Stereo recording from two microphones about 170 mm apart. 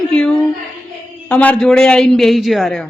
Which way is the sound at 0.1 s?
5° left (ahead or behind).